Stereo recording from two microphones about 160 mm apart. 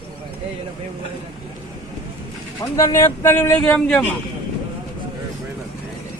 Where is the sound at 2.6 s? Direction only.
20° left (ahead or behind).